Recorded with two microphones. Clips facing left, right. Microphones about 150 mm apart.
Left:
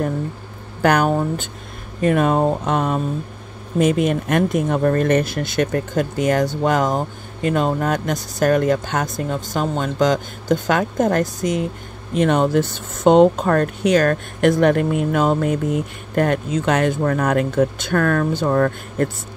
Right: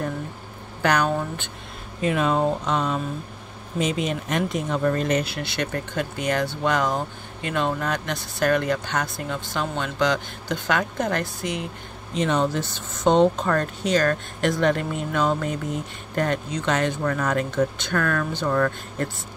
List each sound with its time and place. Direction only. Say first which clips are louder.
0.8 s speech: left 5 dB; 50° left (ahead or behind)
12.1 s speech: left 6 dB; 55° left (ahead or behind)